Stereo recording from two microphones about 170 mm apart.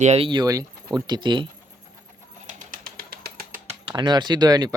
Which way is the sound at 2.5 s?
50° right (ahead or behind).